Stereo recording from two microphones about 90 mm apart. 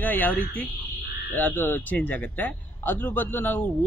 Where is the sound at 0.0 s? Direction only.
20° left (ahead or behind).